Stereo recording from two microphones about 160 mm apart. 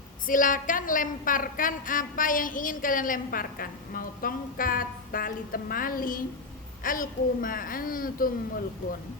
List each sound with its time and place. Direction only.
0.3 s a woman's voice: 55° left (ahead or behind)